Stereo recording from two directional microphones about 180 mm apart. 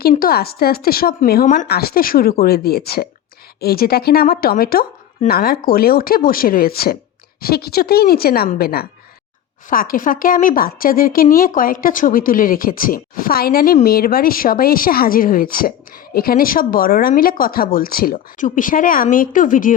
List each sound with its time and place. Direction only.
0.1 s a woman's voice: 55° left (ahead or behind)